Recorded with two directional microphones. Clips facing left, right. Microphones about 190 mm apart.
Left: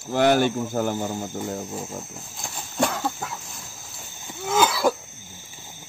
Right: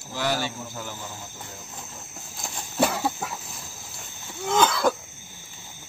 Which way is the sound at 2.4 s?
5° right (ahead or behind).